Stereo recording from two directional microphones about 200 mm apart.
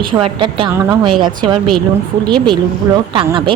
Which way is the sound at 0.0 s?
25° right (ahead or behind).